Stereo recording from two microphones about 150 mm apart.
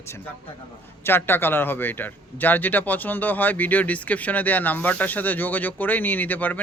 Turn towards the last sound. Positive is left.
turn(degrees=10)  # may be behind; listen again after turning